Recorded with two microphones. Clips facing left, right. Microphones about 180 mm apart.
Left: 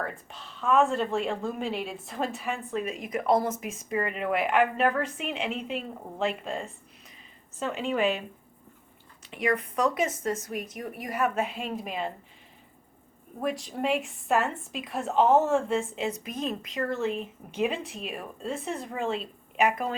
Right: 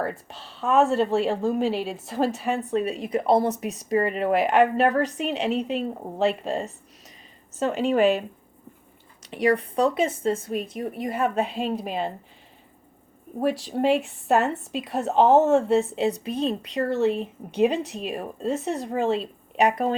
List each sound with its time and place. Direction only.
0.0 s a woman's voice: 35° right (ahead or behind)
9.3 s a woman's voice: 35° right (ahead or behind)
13.4 s a woman's voice: 35° right (ahead or behind)